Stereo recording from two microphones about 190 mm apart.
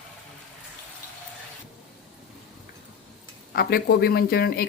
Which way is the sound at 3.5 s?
55° left (ahead or behind).